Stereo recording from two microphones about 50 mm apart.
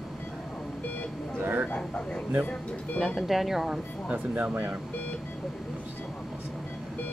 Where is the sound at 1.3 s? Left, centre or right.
Right.